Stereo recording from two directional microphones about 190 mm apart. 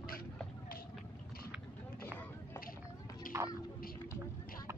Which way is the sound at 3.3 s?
45° left (ahead or behind).